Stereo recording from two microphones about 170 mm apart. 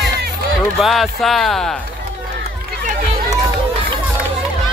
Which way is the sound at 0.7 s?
Centre (ahead or behind).